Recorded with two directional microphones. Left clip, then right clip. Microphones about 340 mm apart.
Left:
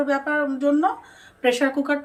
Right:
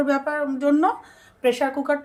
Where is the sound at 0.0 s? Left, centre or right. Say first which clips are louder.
Even; right.